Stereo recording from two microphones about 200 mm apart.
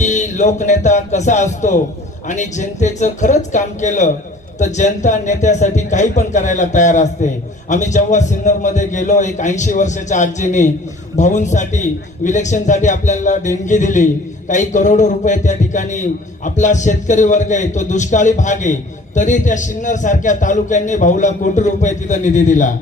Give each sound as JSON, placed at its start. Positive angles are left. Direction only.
{"t": 0.0, "sound": "a man's voice", "side_deg": 35}